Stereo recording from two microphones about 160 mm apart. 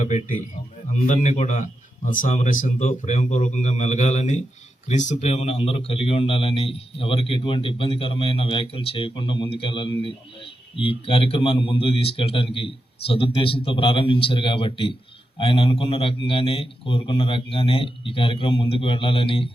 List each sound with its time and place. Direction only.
0.0 s a man's voice: 50° left (ahead or behind); by 19.5 s 35° left (ahead or behind)